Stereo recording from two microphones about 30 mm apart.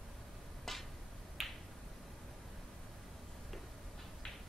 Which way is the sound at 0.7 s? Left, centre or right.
Centre.